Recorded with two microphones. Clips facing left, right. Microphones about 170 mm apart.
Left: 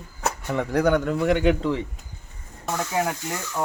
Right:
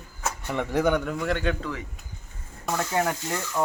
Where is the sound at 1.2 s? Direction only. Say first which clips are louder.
Left 7 dB; 15° left (ahead or behind).